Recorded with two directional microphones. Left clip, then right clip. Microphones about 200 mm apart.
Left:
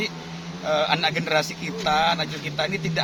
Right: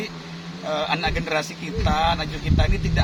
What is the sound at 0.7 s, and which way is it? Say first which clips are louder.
Speech: left 2 dB; 15° left (ahead or behind).